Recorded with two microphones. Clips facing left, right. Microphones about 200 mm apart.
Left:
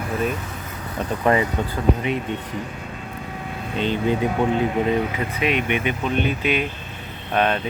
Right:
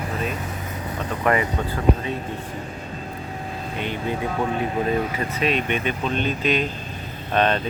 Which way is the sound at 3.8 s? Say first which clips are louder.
Left 6 dB; 25° left (ahead or behind).